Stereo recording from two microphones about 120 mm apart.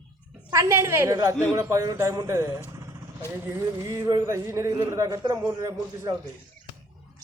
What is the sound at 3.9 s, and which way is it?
A woman's voice, 25° right (ahead or behind).